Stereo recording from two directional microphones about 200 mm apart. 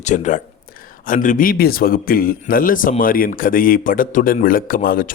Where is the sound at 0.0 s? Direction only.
35° left (ahead or behind).